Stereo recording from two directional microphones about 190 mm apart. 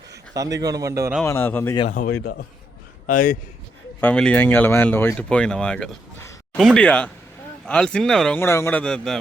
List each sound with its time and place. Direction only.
0.6 s speech: 20° right (ahead or behind)
1.2 s speech: 10° left (ahead or behind)
1.9 s speech: 45° left (ahead or behind)
4.0 s speech: 5° left (ahead or behind)